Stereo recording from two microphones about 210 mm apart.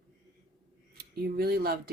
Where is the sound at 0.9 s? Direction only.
45° right (ahead or behind).